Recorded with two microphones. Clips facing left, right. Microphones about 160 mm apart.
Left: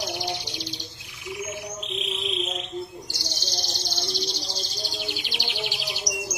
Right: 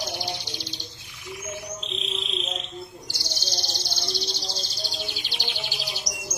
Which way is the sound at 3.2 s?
15° left (ahead or behind).